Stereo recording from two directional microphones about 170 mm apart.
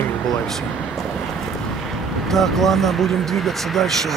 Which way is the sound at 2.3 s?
Centre (ahead or behind).